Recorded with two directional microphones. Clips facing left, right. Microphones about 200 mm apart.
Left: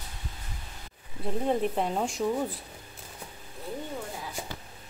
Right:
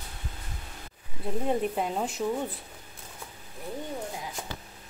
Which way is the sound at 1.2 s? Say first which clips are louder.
Left 1 dB; centre (ahead or behind).